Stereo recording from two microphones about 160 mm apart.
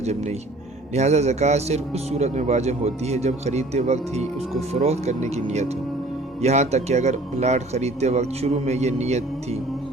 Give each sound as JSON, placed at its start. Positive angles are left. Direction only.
{"t": 0.0, "sound": "speech", "side_deg": -45}